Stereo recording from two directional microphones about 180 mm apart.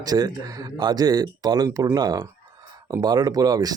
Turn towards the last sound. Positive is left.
turn(degrees=-20)  # may be behind; listen again after turning